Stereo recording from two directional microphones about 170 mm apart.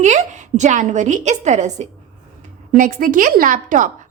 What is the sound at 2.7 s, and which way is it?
A woman's voice, 50° right (ahead or behind).